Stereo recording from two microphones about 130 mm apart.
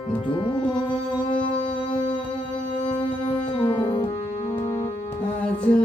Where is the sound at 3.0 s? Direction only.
40° left (ahead or behind).